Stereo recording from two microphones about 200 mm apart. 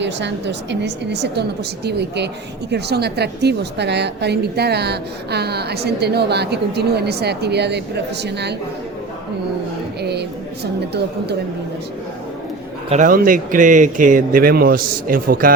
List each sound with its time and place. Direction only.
0.0 s a woman's voice: 60° right (ahead or behind)
10.0 s a sound: 55° right (ahead or behind)
12.9 s speech: 40° right (ahead or behind)